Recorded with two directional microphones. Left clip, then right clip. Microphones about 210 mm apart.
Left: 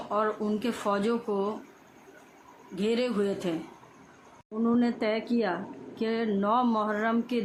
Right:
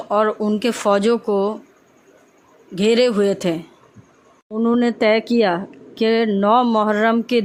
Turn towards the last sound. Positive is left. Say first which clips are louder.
# right 12 dB
turn(degrees=-45)  # may be behind; listen again after turning